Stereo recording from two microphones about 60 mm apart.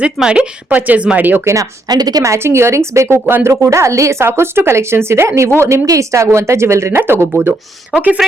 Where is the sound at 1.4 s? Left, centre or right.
Right.